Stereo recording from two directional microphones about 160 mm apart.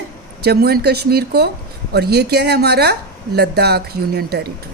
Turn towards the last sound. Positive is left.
turn(degrees=-80)